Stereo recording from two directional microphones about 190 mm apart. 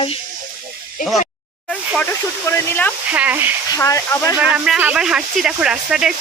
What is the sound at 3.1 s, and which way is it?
Speech, 10° right (ahead or behind).